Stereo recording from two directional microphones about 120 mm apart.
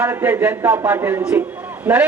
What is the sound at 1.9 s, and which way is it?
Speech, 10° right (ahead or behind).